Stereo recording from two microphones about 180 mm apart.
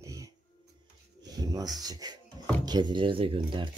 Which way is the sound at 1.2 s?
20° right (ahead or behind).